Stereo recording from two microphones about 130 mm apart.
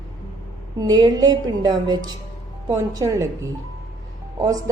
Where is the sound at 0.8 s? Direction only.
30° right (ahead or behind).